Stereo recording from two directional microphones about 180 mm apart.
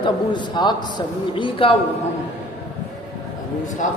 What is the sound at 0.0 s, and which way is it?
A man's voice, 25° left (ahead or behind).